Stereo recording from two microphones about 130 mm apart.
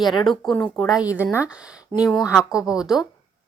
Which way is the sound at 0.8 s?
30° left (ahead or behind).